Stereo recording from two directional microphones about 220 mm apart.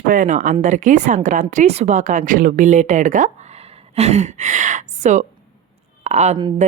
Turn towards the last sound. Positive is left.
turn(degrees=-25)  # may be behind; listen again after turning